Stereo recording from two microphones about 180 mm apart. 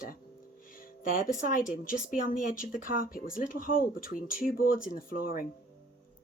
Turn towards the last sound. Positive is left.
turn(degrees=55)  # may be behind; listen again after turning